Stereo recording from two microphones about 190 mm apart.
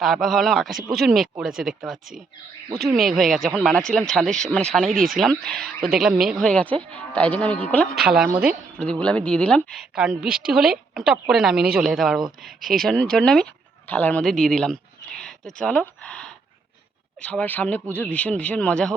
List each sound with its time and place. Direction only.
0.0 s speech: centre (ahead or behind)
4.9 s speech: 45° right (ahead or behind)
5.2 s speech: 5° left (ahead or behind)